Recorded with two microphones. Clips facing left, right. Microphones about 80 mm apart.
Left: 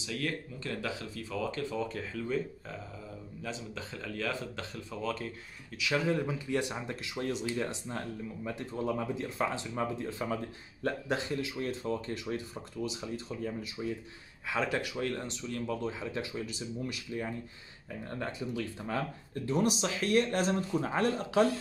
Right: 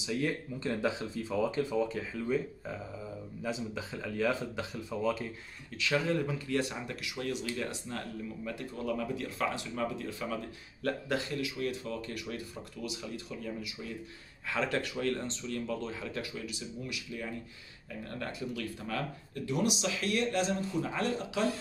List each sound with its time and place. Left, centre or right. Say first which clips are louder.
0.0 s speech: right 3 dB; centre
5.8 s speech: even; centre
6.9 s speech: left 1 dB; left
14.5 s speech: even; centre
16.4 s speech: left 2 dB; left
18.0 s speech: left 1 dB; left